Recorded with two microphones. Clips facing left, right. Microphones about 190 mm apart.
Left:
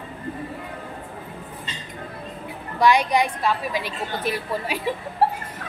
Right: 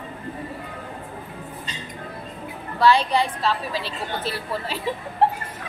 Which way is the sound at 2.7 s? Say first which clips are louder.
Even; 15° left (ahead or behind).